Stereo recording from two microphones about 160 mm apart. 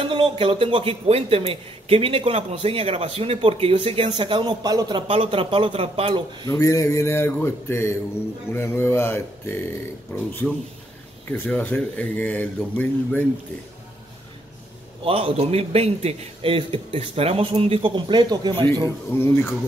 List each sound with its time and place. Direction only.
0.0 s speech: 35° right (ahead or behind)
6.4 s speech: 20° left (ahead or behind)
11.3 s speech: 10° left (ahead or behind)
15.0 s speech: 35° right (ahead or behind)
19.1 s speech: 15° left (ahead or behind)